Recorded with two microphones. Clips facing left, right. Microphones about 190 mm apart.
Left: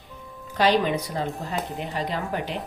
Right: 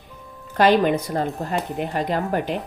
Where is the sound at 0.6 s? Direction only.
50° right (ahead or behind).